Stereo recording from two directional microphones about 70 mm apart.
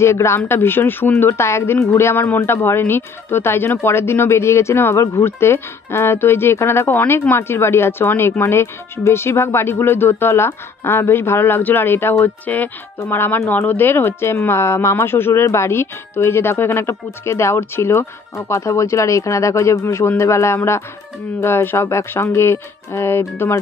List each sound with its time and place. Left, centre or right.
0.0 s speech: left
1.3 s speech: left